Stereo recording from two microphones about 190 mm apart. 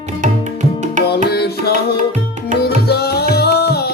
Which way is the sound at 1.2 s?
60° left (ahead or behind).